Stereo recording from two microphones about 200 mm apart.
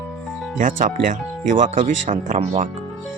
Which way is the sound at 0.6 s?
40° right (ahead or behind).